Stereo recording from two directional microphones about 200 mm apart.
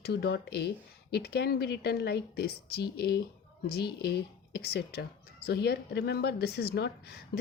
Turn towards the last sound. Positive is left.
turn(degrees=55)  # may be behind; listen again after turning